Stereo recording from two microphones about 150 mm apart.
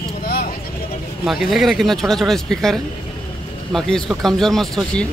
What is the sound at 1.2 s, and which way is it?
Speech, centre (ahead or behind).